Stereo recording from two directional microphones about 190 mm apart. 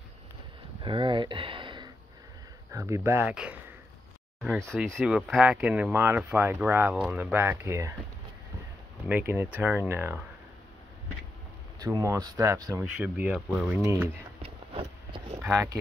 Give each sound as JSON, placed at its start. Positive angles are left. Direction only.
{"t": 0.8, "sound": "a sound", "side_deg": -25}
{"t": 2.7, "sound": "speech", "side_deg": -15}
{"t": 4.6, "sound": "speech", "side_deg": 5}
{"t": 9.0, "sound": "speech", "side_deg": -10}
{"t": 11.8, "sound": "speech", "side_deg": -20}
{"t": 12.9, "sound": "speech", "side_deg": -10}
{"t": 14.4, "sound": "a sound", "side_deg": -30}
{"t": 15.4, "sound": "speech", "side_deg": -10}